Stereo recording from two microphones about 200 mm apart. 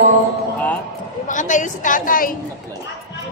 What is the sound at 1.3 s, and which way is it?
A woman's voice, 40° left (ahead or behind).